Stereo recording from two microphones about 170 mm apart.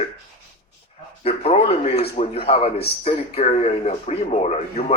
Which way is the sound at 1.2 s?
35° left (ahead or behind).